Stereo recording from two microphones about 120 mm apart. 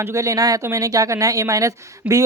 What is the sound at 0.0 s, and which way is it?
Speech, 25° right (ahead or behind).